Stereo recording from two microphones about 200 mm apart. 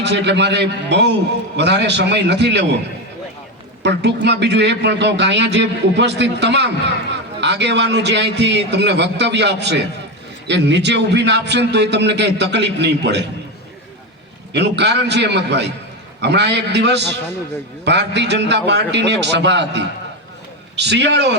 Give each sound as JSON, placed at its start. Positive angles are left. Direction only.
{"t": 0.0, "sound": "a man's voice", "side_deg": -60}
{"t": 3.8, "sound": "a man's voice", "side_deg": -60}
{"t": 14.5, "sound": "a man's voice", "side_deg": -60}